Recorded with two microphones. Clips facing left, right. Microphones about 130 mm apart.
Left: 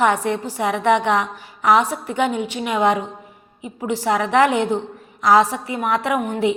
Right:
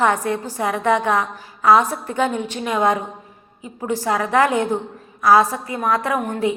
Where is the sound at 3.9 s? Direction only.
20° left (ahead or behind).